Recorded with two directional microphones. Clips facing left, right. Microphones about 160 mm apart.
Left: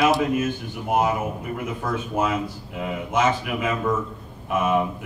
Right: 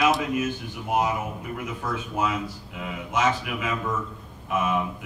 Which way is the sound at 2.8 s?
50° left (ahead or behind).